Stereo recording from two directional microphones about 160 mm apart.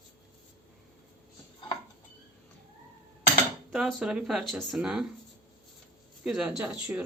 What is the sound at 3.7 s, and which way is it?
Speech, 5° right (ahead or behind).